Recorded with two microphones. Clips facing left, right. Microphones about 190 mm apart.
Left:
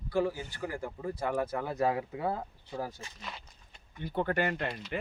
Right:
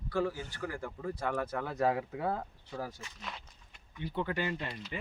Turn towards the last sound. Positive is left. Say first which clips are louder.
# left 4 dB
turn(degrees=60)  # may be behind; listen again after turning